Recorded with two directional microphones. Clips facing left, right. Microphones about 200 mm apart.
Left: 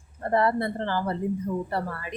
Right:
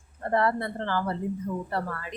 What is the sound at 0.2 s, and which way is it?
A woman's voice, 15° left (ahead or behind).